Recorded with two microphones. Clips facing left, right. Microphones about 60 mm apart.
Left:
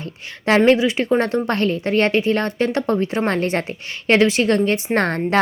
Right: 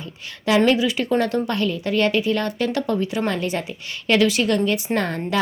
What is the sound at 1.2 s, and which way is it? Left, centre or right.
A woman's voice, left.